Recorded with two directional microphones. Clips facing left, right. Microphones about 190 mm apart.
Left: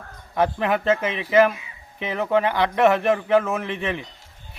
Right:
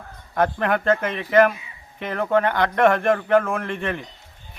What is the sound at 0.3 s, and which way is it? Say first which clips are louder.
A man's voice: even; 5° left (ahead or behind).